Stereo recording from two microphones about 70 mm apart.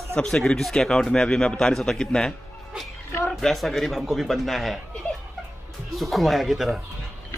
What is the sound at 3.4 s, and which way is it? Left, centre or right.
A man's voice, centre.